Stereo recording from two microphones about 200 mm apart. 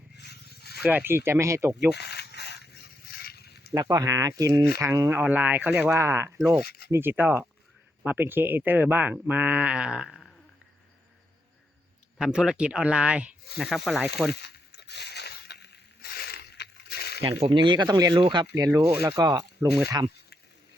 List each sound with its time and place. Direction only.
0.2 s a sound: 55° left (ahead or behind)
0.8 s speech: 10° right (ahead or behind)
1.9 s a sound: 55° left (ahead or behind)
3.8 s speech: 15° right (ahead or behind)
6.7 s speech: 50° left (ahead or behind)
6.9 s speech: 10° right (ahead or behind)
12.2 s speech: 5° right (ahead or behind)
14.3 s a sound: 55° left (ahead or behind)
17.2 s speech: 30° right (ahead or behind)